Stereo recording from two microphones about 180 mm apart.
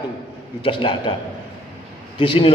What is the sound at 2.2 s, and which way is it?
Speech, 30° left (ahead or behind).